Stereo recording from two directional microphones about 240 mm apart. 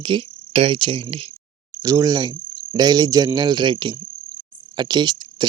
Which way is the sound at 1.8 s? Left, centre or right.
Centre.